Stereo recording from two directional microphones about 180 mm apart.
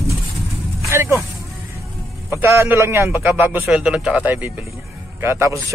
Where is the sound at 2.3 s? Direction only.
15° right (ahead or behind).